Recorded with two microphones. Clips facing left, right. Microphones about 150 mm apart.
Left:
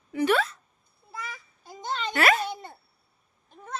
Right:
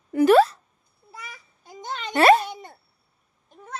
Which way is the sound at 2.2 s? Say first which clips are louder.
Right 8 dB; 30° right (ahead or behind).